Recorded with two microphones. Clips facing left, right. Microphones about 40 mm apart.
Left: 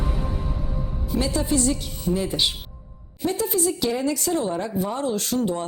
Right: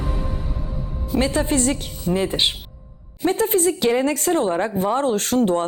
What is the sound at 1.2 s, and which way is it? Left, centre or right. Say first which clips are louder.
Speech: right 3 dB; right.